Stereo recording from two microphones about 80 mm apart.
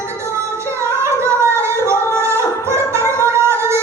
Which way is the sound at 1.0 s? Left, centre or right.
Right.